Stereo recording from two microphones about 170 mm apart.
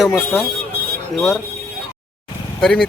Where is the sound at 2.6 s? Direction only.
5° left (ahead or behind).